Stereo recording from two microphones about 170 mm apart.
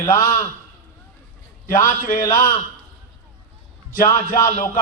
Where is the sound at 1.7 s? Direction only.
15° left (ahead or behind).